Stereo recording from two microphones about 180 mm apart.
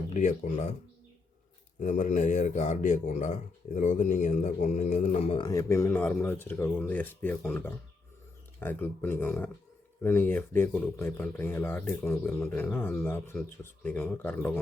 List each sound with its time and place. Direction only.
0.1 s speech: 40° left (ahead or behind)
1.8 s speech: 45° left (ahead or behind)
5.5 s speech: 15° left (ahead or behind)